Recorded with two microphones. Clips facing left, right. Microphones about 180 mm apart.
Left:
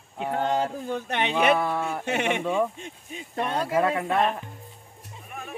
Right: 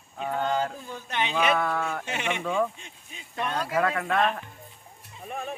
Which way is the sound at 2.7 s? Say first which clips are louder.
Left 9 dB; 55° left (ahead or behind).